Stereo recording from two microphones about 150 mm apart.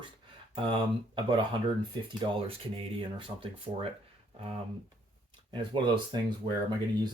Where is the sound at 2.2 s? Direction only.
35° right (ahead or behind).